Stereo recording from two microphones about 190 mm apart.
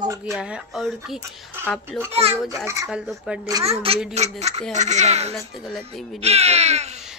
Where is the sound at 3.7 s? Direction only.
30° right (ahead or behind).